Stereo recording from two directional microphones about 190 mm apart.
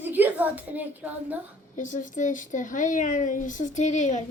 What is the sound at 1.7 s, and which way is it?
Speech, 40° left (ahead or behind).